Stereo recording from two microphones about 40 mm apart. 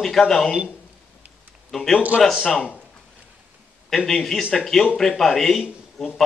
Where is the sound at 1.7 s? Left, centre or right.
Centre.